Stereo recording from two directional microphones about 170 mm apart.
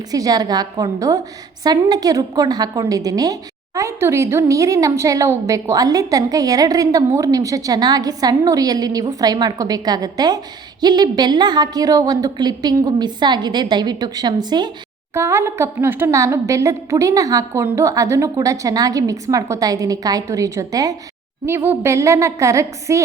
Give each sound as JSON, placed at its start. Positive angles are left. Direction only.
{"t": 0.1, "sound": "a woman's voice", "side_deg": -20}